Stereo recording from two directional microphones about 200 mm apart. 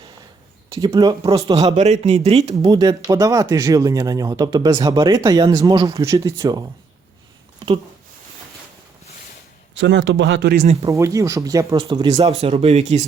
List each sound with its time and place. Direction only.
0.7 s speech: 20° right (ahead or behind)
1.5 s speech: 35° right (ahead or behind)
2.6 s speech: 20° right (ahead or behind)
9.7 s speech: 65° right (ahead or behind)
10.8 s speech: 15° right (ahead or behind); by 13.1 s 35° right (ahead or behind)